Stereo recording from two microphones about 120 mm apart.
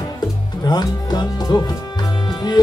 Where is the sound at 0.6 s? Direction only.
35° left (ahead or behind).